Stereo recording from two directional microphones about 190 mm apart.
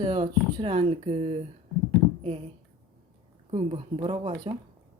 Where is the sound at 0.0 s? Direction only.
30° right (ahead or behind).